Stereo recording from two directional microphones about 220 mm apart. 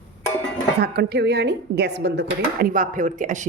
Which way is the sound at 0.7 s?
45° right (ahead or behind).